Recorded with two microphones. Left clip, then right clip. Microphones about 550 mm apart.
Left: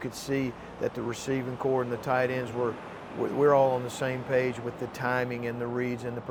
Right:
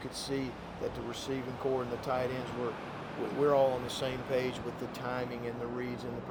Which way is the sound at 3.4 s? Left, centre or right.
Left.